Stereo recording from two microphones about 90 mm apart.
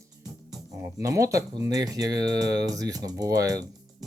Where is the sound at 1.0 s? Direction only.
35° right (ahead or behind).